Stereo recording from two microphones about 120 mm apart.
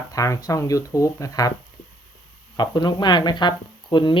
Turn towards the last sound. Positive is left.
turn(degrees=40)  # may be behind; listen again after turning